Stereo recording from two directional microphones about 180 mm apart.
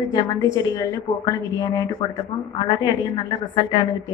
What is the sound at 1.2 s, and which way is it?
Speech, 20° left (ahead or behind).